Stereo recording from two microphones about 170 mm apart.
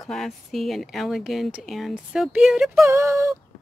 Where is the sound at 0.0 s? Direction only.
Centre (ahead or behind).